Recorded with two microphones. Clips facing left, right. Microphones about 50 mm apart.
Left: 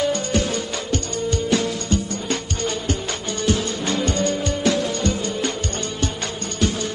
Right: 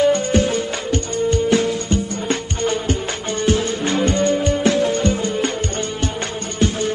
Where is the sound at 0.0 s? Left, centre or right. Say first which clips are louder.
Right 6 dB; right.